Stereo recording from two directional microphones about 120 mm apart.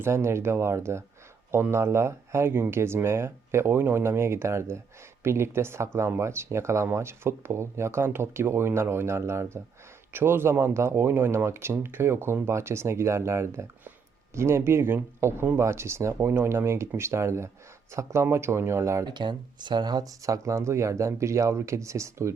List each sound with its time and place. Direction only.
0.0 s speech: 20° right (ahead or behind)
19.0 s speech: 40° right (ahead or behind)